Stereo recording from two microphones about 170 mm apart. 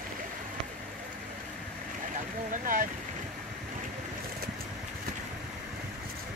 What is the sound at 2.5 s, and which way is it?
Speech, 50° right (ahead or behind).